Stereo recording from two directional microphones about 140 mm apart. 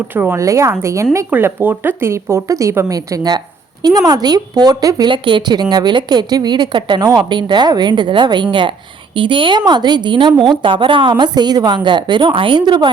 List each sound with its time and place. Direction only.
0.2 s speech: 20° right (ahead or behind)